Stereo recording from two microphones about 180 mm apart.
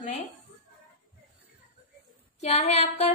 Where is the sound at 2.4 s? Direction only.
35° left (ahead or behind).